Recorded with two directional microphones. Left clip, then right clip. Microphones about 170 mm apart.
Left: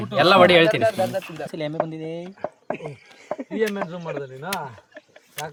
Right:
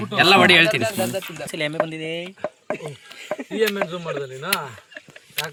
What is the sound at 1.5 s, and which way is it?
Speech, 30° left (ahead or behind).